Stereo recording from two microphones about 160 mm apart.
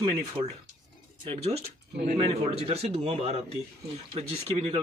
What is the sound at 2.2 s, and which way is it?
Speech, 40° right (ahead or behind).